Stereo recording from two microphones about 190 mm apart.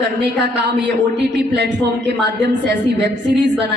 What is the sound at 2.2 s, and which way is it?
Speech, 65° right (ahead or behind).